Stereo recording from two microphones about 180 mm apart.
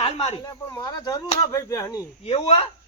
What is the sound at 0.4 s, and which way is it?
Speech, 20° left (ahead or behind).